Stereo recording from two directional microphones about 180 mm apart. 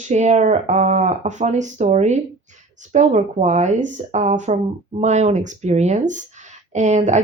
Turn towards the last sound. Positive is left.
turn(degrees=-40)  # may be behind; listen again after turning